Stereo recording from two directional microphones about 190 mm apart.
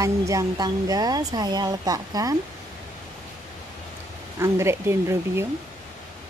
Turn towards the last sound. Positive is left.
turn(degrees=-15)  # may be behind; listen again after turning